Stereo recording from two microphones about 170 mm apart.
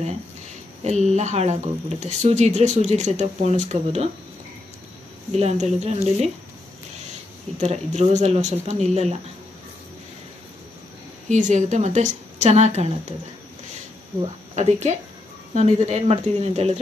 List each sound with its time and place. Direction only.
0.8 s speech: 40° right (ahead or behind)
5.3 s speech: 40° right (ahead or behind)
7.6 s speech: 40° right (ahead or behind)
11.2 s a woman's voice: 45° right (ahead or behind)
14.5 s speech: 40° right (ahead or behind)